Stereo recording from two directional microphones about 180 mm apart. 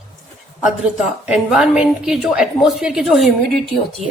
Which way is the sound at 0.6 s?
5° right (ahead or behind).